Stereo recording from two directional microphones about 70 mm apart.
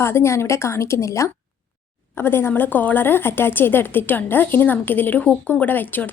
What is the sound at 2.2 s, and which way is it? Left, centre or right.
Speech, left.